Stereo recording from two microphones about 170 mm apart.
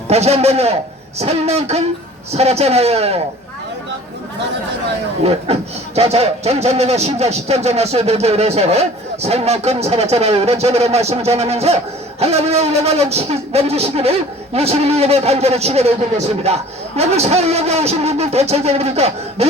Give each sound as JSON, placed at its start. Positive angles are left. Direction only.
{"t": 0.1, "sound": "speech", "side_deg": -40}
{"t": 5.2, "sound": "speech", "side_deg": -35}